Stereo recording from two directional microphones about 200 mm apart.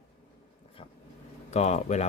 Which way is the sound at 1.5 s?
35° left (ahead or behind).